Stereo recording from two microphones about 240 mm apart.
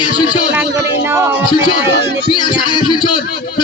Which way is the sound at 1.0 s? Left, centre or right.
Centre.